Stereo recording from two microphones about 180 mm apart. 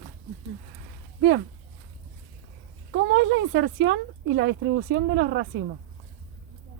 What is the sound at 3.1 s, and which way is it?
Speech, 90° right.